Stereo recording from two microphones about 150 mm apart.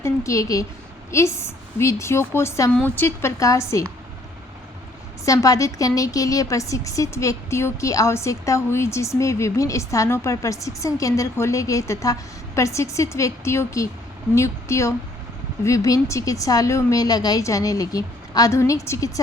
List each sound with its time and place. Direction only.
0.0 s a woman's voice: 20° left (ahead or behind)
5.2 s a woman's voice: 20° left (ahead or behind)